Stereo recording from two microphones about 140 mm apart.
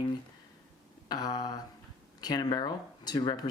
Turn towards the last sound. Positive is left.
turn(degrees=30)  # may be behind; listen again after turning